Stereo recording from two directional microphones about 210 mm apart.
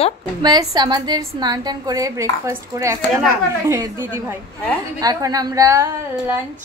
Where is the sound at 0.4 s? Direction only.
20° right (ahead or behind).